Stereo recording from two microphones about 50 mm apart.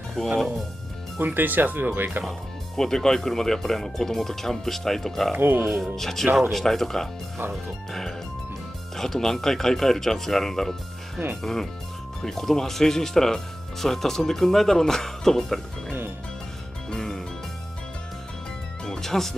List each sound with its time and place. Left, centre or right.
0.2 s speech: centre
1.2 s speech: right
2.2 s speech: centre
5.3 s speech: right
5.6 s speech: centre
8.9 s speech: centre
16.9 s music: centre
18.9 s music: centre